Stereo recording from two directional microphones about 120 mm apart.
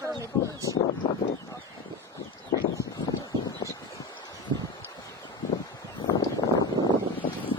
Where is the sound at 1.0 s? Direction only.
40° left (ahead or behind).